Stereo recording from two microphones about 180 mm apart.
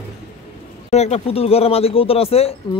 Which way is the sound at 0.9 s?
35° left (ahead or behind).